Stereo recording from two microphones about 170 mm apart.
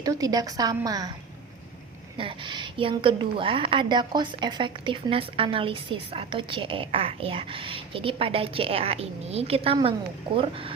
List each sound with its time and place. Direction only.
0.0 s a woman's voice: 20° right (ahead or behind)
2.1 s a woman's voice: 30° right (ahead or behind)